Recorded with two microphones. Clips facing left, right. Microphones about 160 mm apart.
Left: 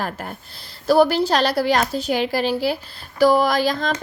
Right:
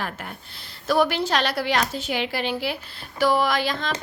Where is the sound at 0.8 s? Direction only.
35° left (ahead or behind).